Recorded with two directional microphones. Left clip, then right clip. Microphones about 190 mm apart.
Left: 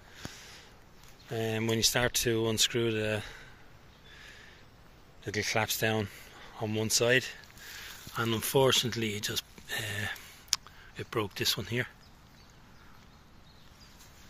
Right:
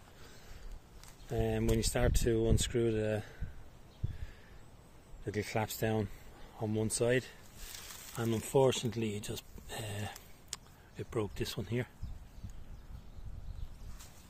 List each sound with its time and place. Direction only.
1.3 s speech: 10° right (ahead or behind)
5.2 s speech: 10° right (ahead or behind)